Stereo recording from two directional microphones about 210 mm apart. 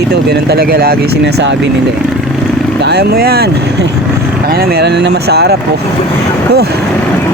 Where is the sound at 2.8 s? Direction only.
50° right (ahead or behind).